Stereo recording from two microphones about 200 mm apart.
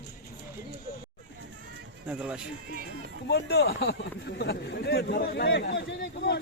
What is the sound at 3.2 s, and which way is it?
Speech, 55° left (ahead or behind).